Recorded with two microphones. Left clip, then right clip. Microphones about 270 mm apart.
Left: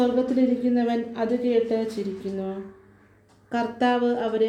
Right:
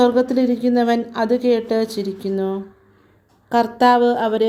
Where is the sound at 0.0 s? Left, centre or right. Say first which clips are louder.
Right 6 dB; right.